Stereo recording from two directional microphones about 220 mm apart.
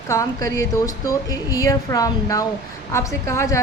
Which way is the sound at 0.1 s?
15° left (ahead or behind).